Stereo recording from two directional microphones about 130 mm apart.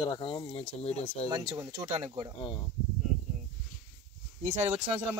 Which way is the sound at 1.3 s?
30° right (ahead or behind).